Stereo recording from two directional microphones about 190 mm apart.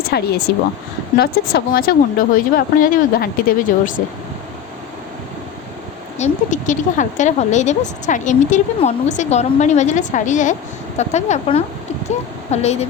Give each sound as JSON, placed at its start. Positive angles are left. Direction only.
{"t": 0.1, "sound": "speech", "side_deg": 55}
{"t": 6.1, "sound": "speech", "side_deg": 40}